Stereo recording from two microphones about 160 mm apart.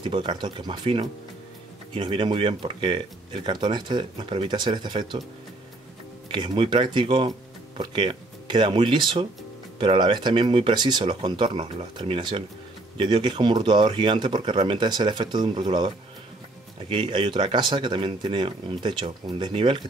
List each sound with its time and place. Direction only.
0.0 s speech: 30° right (ahead or behind)
6.3 s speech: 30° right (ahead or behind)
16.9 s speech: 30° right (ahead or behind)